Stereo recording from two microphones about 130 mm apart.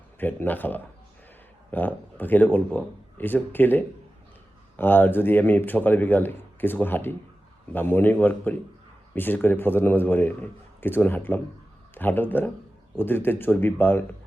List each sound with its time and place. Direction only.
0.2 s speech: 15° left (ahead or behind)